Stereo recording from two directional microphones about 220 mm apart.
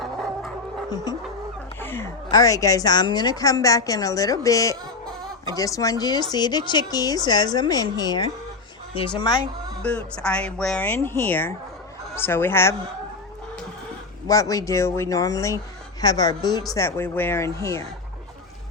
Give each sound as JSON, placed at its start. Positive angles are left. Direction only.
{"t": 0.0, "sound": "music", "side_deg": 0}
{"t": 1.8, "sound": "a woman's voice", "side_deg": 10}
{"t": 9.8, "sound": "a woman's voice", "side_deg": 5}
{"t": 14.3, "sound": "a woman's voice", "side_deg": 15}